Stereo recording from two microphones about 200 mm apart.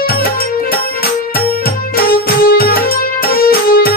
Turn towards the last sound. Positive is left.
turn(degrees=50)  # may be behind; listen again after turning